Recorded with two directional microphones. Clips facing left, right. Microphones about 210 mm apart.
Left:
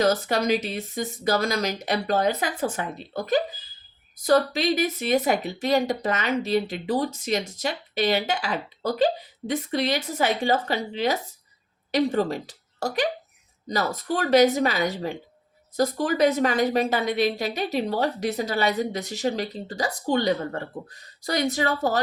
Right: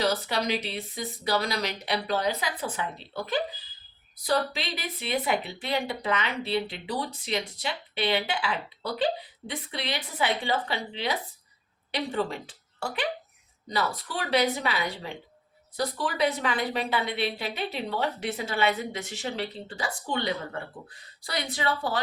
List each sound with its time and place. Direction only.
0.0 s a woman's voice: 45° left (ahead or behind)